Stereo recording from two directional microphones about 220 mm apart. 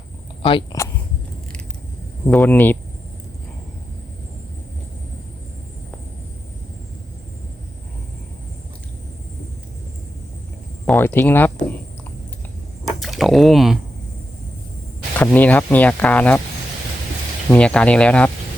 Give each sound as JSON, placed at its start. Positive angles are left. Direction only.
{"t": 0.4, "sound": "a woman's voice", "side_deg": 20}
{"t": 2.2, "sound": "speech", "side_deg": 5}
{"t": 10.8, "sound": "speech", "side_deg": 10}
{"t": 12.8, "sound": "a sound", "side_deg": 0}
{"t": 15.2, "sound": "speech", "side_deg": 5}
{"t": 17.5, "sound": "speech", "side_deg": 5}